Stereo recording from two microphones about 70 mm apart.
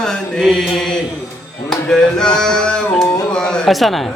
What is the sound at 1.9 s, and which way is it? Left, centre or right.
Music, centre.